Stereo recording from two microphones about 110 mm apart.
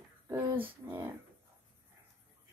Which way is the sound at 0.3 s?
15° right (ahead or behind).